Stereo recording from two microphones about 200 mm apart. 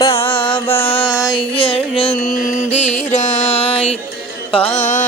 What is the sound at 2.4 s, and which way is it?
Music, 40° left (ahead or behind).